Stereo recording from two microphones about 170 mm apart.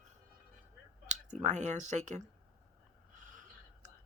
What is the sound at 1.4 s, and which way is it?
Speech, 45° right (ahead or behind).